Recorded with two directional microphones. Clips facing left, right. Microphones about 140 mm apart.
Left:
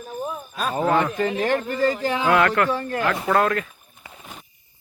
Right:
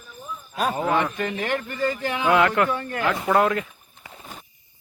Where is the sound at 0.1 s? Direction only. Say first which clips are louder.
Left 8 dB; 65° left (ahead or behind).